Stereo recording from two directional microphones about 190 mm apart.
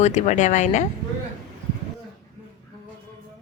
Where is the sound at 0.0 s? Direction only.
35° left (ahead or behind).